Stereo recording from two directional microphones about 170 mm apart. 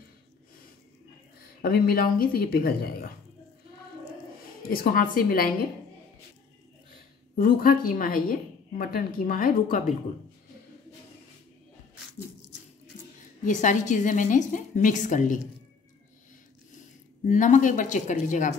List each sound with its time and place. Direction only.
1.6 s a woman's voice: 60° left (ahead or behind)
4.6 s a woman's voice: 60° left (ahead or behind)
7.3 s a woman's voice: 55° left (ahead or behind)
13.4 s a woman's voice: 45° left (ahead or behind)
17.3 s a woman's voice: 50° left (ahead or behind)